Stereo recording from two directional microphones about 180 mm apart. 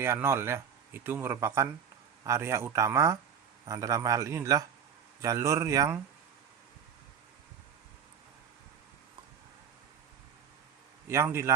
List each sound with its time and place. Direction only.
0.0 s a man's voice: 15° right (ahead or behind)
11.1 s speech: 15° right (ahead or behind)